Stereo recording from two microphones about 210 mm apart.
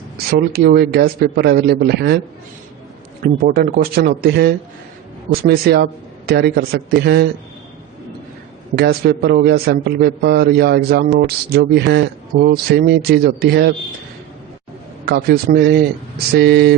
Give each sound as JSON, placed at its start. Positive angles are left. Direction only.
{"t": 0.3, "sound": "speech", "side_deg": -50}
{"t": 3.4, "sound": "speech", "side_deg": -45}
{"t": 8.7, "sound": "speech", "side_deg": -50}
{"t": 15.0, "sound": "speech", "side_deg": -50}